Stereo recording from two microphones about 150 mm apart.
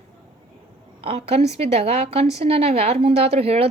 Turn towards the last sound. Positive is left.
turn(degrees=-40)  # may be behind; listen again after turning